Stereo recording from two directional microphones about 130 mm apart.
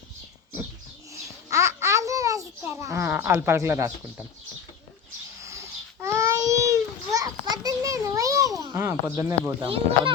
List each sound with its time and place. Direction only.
1.1 s babbling: 25° right (ahead or behind)
2.6 s a woman's voice: 20° right (ahead or behind)
5.4 s babbling: 25° right (ahead or behind)
9.6 s a child's voice: 45° right (ahead or behind)